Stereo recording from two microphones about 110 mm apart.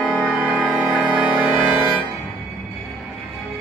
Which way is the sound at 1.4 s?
45° left (ahead or behind).